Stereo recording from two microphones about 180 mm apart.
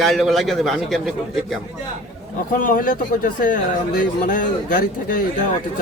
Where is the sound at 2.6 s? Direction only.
50° left (ahead or behind).